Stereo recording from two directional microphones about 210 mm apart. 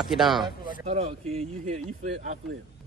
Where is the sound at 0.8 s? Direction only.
30° right (ahead or behind).